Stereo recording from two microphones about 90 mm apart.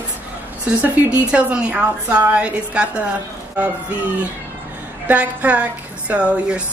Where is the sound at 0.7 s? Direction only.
15° right (ahead or behind).